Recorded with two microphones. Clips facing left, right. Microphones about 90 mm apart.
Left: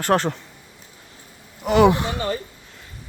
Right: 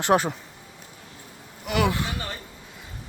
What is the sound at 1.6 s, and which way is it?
Speech, 25° left (ahead or behind).